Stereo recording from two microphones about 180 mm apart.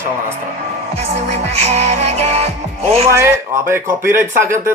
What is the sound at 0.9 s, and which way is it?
Music, 35° right (ahead or behind).